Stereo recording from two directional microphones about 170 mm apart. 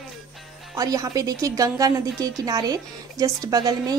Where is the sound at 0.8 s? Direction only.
20° right (ahead or behind).